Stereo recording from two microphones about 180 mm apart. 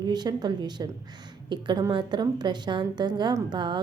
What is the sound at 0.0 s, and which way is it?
A woman's voice, 25° right (ahead or behind).